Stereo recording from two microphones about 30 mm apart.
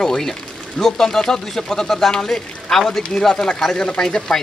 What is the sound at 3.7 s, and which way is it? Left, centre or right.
Speech, left.